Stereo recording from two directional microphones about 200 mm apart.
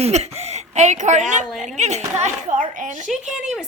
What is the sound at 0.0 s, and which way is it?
A woman's voice, 30° right (ahead or behind).